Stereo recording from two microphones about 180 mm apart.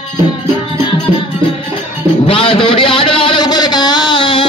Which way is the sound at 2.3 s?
30° left (ahead or behind).